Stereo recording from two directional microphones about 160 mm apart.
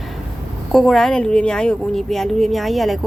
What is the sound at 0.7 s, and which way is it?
A woman's voice, centre (ahead or behind).